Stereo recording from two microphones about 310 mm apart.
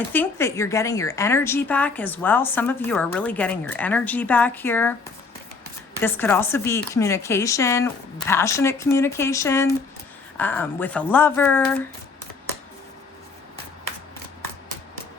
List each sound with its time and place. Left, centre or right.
0.1 s a woman's voice: centre
6.0 s a woman's voice: centre